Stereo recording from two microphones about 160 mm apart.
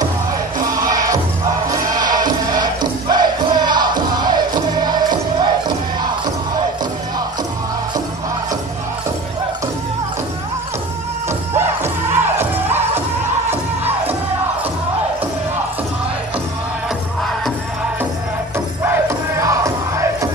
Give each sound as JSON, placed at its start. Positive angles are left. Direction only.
{"t": 0.6, "sound": "music", "side_deg": -20}
{"t": 11.5, "sound": "music", "side_deg": -15}
{"t": 18.9, "sound": "music", "side_deg": -20}